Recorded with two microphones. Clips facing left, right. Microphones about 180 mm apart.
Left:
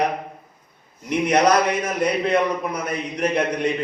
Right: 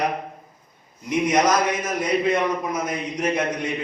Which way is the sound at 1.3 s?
60° left (ahead or behind).